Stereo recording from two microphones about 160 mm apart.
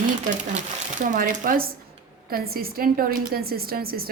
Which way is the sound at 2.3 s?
70° right (ahead or behind).